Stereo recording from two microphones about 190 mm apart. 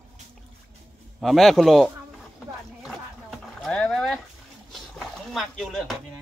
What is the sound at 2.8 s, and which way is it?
Dog, centre (ahead or behind).